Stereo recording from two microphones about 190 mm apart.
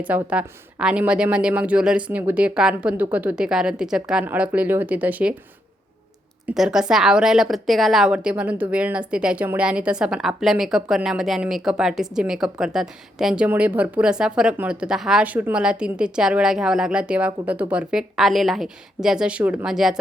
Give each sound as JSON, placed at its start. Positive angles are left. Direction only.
{"t": 0.0, "sound": "a woman's voice", "side_deg": -5}
{"t": 6.5, "sound": "a woman's voice", "side_deg": 0}